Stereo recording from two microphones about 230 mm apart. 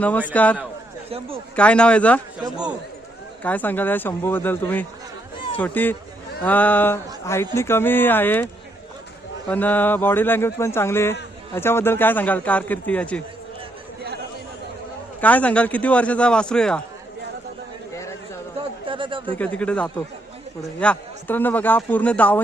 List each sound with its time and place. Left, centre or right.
0.3 s a man's voice: centre
1.5 s a man's voice: centre
3.4 s a man's voice: centre
9.5 s a man's voice: centre
15.2 s a man's voice: centre
18.9 s speech: right
19.4 s a man's voice: centre